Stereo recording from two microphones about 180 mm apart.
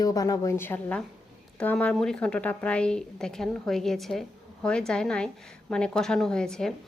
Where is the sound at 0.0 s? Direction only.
20° left (ahead or behind).